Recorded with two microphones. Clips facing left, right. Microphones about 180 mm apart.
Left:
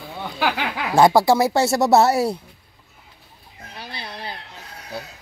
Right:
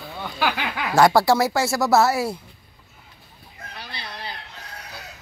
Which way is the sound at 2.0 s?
35° left (ahead or behind).